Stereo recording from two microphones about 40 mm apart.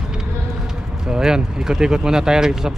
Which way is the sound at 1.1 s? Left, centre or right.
Centre.